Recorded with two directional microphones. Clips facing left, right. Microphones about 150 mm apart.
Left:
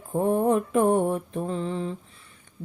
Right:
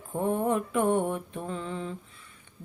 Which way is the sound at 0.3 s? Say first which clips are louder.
Left 4 dB; 40° left (ahead or behind).